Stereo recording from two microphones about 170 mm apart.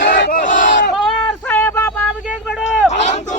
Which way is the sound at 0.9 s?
Centre (ahead or behind).